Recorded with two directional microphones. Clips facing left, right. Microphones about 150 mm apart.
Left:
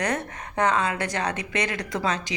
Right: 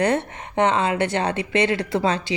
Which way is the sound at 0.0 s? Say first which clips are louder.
Right 6 dB; 25° right (ahead or behind).